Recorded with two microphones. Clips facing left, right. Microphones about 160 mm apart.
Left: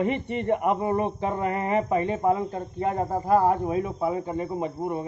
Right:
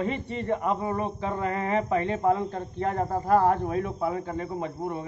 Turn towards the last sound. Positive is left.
turn(degrees=10)  # may be behind; listen again after turning